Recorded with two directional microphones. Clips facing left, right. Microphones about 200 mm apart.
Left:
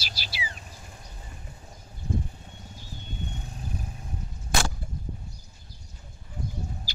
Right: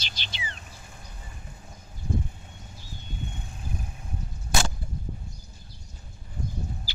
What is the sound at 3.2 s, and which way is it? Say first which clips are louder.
Vehicle: left 1 dB; 40° left (ahead or behind).